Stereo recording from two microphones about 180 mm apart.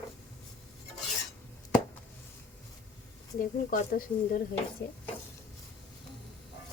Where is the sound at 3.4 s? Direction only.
50° left (ahead or behind).